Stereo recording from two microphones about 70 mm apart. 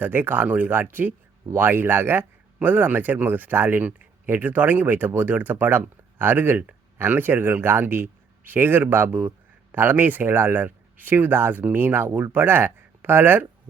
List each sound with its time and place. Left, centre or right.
0.0 s a man's voice: right